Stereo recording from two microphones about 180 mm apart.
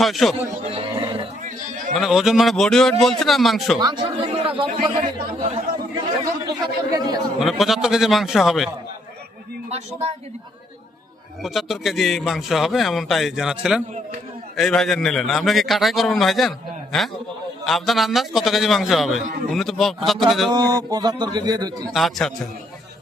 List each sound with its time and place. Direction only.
0.0 s a man's voice: centre (ahead or behind)
0.6 s a sound: 30° right (ahead or behind)
1.5 s a sound: 45° right (ahead or behind)
2.0 s a man's voice: centre (ahead or behind)
3.8 s a man's voice: 25° right (ahead or behind)
6.9 s a man's voice: 20° right (ahead or behind)
7.3 s a man's voice: centre (ahead or behind)
11.4 s a man's voice: centre (ahead or behind)
20.5 s a man's voice: 20° right (ahead or behind)
21.9 s a man's voice: centre (ahead or behind)